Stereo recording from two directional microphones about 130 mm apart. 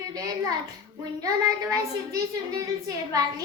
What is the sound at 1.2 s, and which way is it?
Speech, 25° right (ahead or behind).